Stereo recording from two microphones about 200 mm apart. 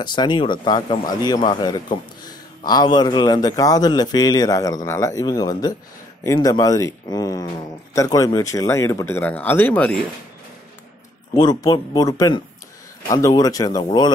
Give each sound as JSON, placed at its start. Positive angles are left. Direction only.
{"t": 0.0, "sound": "a man's voice", "side_deg": 20}
{"t": 11.3, "sound": "a man's voice", "side_deg": 20}